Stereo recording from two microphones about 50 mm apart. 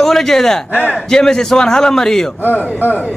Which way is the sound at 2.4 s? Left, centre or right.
Left.